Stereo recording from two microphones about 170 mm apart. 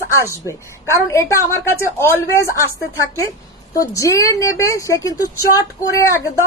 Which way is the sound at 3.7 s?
20° left (ahead or behind).